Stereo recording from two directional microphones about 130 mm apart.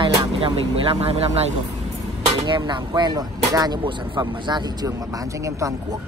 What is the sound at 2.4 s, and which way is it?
Speech, 35° right (ahead or behind).